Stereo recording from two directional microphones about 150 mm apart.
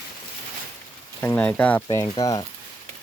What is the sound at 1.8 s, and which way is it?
Speech, 30° left (ahead or behind).